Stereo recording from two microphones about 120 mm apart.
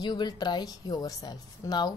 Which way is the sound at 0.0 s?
35° left (ahead or behind).